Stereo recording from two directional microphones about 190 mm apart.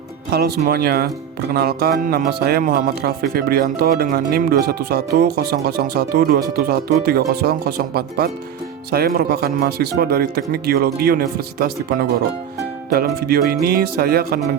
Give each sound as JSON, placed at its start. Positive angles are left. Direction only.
{"t": 0.3, "sound": "speech", "side_deg": -55}